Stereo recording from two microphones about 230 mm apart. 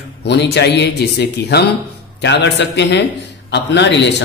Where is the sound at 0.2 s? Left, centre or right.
Left.